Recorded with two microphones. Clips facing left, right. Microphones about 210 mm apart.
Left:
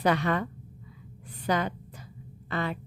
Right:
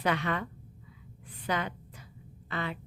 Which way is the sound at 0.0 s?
40° left (ahead or behind).